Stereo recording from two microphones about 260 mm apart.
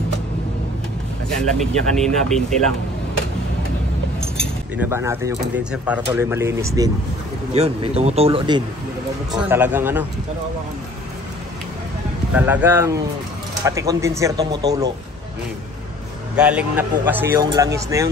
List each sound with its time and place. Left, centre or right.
1.4 s speech: centre
4.4 s keys jangling: centre
5.3 s a man's voice: centre
7.5 s speech: right
9.3 s a man's voice: centre
12.4 s a man's voice: centre
16.3 s a man's voice: centre